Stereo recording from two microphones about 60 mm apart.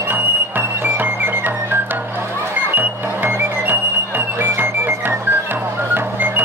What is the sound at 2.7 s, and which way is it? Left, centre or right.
Music, right.